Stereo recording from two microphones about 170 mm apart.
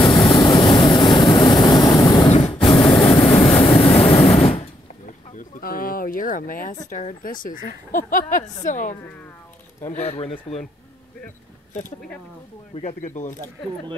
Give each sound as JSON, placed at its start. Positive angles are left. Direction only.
{"t": 0.1, "sound": "vehicle", "side_deg": 25}
{"t": 2.2, "sound": "vehicle", "side_deg": 35}
{"t": 3.6, "sound": "a sound", "side_deg": 35}
{"t": 5.3, "sound": "a sound", "side_deg": 55}
{"t": 8.6, "sound": "speech", "side_deg": 50}
{"t": 12.7, "sound": "speech", "side_deg": 45}